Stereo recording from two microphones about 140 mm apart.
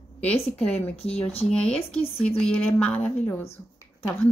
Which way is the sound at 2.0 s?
45° left (ahead or behind).